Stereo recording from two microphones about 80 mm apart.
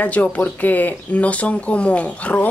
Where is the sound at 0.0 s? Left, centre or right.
Centre.